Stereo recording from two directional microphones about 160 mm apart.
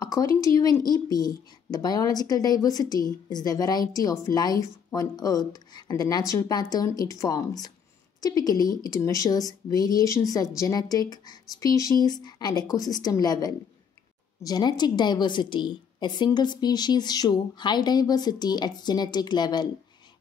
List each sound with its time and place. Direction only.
0.0 s speech: 20° left (ahead or behind)